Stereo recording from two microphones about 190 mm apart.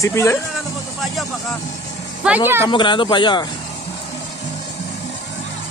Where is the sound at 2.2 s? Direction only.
5° right (ahead or behind).